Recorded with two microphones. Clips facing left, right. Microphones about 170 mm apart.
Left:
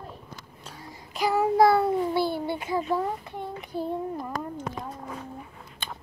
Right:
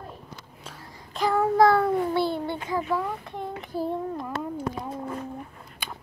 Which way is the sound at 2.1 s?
5° left (ahead or behind).